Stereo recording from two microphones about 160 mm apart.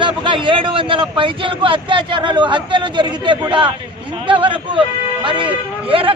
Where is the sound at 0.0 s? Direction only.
30° right (ahead or behind).